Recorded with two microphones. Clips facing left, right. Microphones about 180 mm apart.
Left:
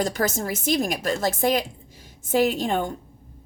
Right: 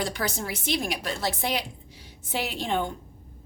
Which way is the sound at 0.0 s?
45° left (ahead or behind).